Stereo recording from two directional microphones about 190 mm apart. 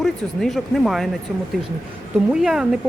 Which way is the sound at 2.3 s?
5° right (ahead or behind).